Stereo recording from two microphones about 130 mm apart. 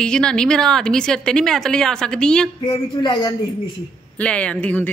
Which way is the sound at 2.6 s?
35° left (ahead or behind).